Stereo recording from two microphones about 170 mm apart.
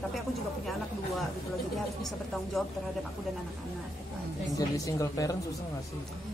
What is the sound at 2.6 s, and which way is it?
Speech, centre (ahead or behind).